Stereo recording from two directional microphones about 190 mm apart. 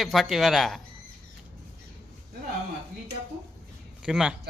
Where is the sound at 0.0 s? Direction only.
Centre (ahead or behind).